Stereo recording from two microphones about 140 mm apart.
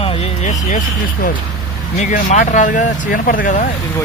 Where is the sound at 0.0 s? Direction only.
45° left (ahead or behind).